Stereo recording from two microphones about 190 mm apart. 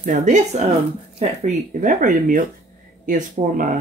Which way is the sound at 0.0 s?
40° right (ahead or behind).